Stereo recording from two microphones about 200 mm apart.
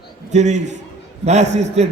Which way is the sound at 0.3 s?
35° right (ahead or behind).